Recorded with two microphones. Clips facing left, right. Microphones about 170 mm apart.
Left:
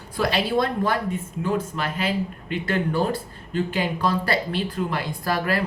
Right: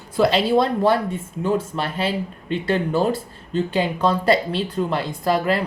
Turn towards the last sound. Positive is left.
turn(degrees=-25)  # may be behind; listen again after turning